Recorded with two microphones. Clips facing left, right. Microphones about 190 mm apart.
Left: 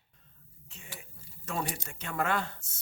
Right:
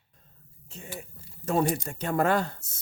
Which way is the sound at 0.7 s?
40° right (ahead or behind).